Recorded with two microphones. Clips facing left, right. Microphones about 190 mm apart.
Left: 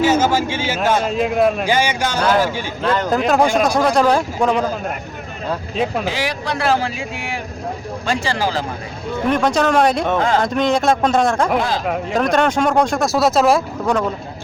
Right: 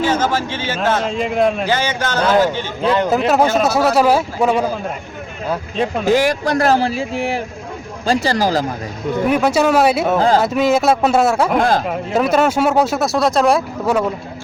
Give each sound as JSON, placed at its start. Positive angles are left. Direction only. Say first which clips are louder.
{"t": 0.0, "sound": "a man's voice", "louder": "left 2 dB", "side_deg": 10}
{"t": 3.1, "sound": "speech", "louder": "left 2 dB", "side_deg": -5}
{"t": 6.1, "sound": "a man's voice", "louder": "right 8 dB", "side_deg": -45}
{"t": 9.2, "sound": "speech", "louder": "right 1 dB", "side_deg": -10}
{"t": 10.2, "sound": "a man's voice", "louder": "right 3 dB", "side_deg": -35}
{"t": 10.4, "sound": "speech", "louder": "right 2 dB", "side_deg": -5}
{"t": 11.5, "sound": "speech", "louder": "right 4 dB", "side_deg": -50}
{"t": 11.9, "sound": "speech", "louder": "right 1 dB", "side_deg": -5}